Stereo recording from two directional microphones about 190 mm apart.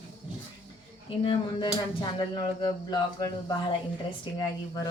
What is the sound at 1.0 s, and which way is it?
Speech, 25° left (ahead or behind).